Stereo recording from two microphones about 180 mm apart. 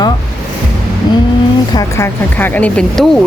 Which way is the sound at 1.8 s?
15° left (ahead or behind).